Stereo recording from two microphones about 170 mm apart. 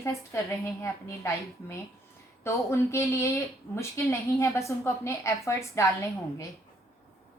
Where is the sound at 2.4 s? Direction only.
15° left (ahead or behind).